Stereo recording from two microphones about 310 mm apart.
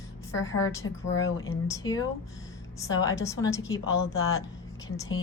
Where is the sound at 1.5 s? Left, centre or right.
Centre.